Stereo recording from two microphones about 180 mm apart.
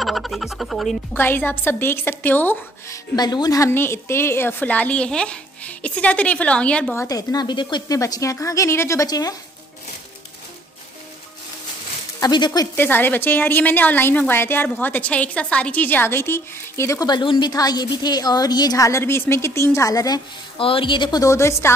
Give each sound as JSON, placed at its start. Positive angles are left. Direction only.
{"t": 0.0, "sound": "music", "side_deg": 0}
{"t": 1.1, "sound": "a woman's voice", "side_deg": 10}
{"t": 3.2, "sound": "a woman's voice", "side_deg": 20}
{"t": 12.2, "sound": "speech", "side_deg": 25}
{"t": 12.7, "sound": "a woman's voice", "side_deg": 10}